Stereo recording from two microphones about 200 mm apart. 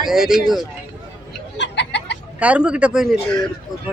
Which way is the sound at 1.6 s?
60° left (ahead or behind).